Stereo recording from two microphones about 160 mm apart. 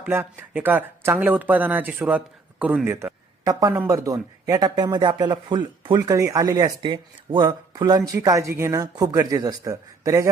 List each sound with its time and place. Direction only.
0.0 s speech: 10° right (ahead or behind)